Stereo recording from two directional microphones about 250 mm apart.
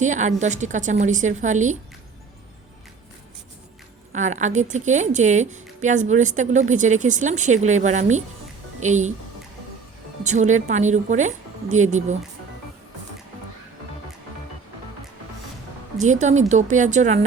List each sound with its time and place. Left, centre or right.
0.0 s a woman's voice: right
4.1 s a woman's voice: right
10.2 s a woman's voice: right
16.0 s a woman's voice: right